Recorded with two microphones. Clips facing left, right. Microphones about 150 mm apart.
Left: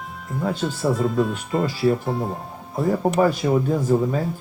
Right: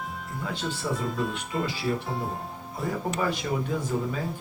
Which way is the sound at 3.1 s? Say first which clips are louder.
Left 10 dB; 45° left (ahead or behind).